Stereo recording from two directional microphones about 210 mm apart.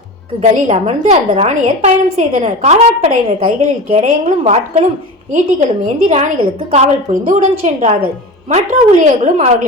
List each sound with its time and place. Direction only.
0.5 s a woman's voice: 30° right (ahead or behind)